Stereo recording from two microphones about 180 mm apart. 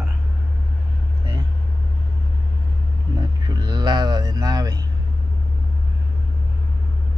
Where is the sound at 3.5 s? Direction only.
20° right (ahead or behind).